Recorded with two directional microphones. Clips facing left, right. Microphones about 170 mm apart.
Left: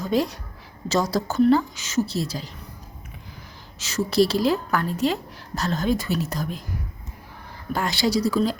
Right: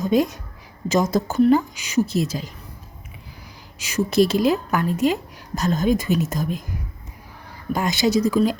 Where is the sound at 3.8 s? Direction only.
15° right (ahead or behind).